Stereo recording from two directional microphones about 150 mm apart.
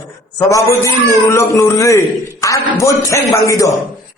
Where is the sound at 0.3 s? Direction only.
20° left (ahead or behind).